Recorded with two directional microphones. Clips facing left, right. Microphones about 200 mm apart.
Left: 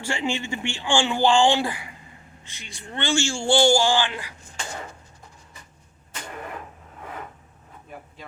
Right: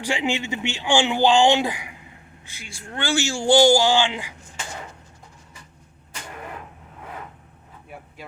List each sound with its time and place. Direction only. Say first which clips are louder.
0.0 s speech: right 2 dB; 15° right (ahead or behind)
3.2 s speech: right 4 dB; 15° right (ahead or behind)